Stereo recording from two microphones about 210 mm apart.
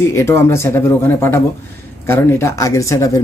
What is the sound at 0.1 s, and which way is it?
Speech, 10° left (ahead or behind).